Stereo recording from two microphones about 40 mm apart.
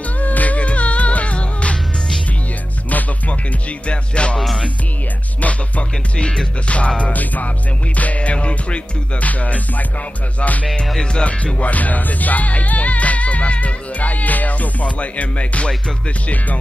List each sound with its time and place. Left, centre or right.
0.2 s music: left
2.9 s music: left
3.8 s music: left
5.4 s music: left
6.1 s music: left
7.0 s music: left